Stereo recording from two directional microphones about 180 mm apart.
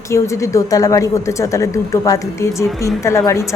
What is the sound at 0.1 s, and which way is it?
A woman's voice, 15° left (ahead or behind).